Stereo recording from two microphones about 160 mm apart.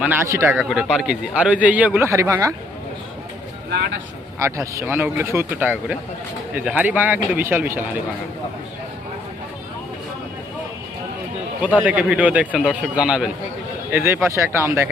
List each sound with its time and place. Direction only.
0.0 s speech: 15° right (ahead or behind)
0.7 s speech: centre (ahead or behind); by 2.5 s 20° right (ahead or behind)
4.4 s speech: 20° right (ahead or behind)
11.6 s speech: 10° right (ahead or behind)